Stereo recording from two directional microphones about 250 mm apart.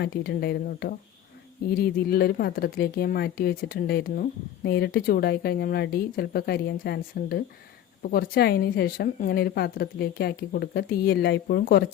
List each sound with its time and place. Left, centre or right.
0.0 s speech: left